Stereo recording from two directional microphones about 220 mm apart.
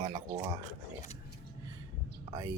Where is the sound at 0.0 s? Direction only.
20° right (ahead or behind).